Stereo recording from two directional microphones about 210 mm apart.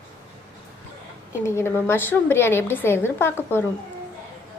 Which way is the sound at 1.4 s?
10° left (ahead or behind).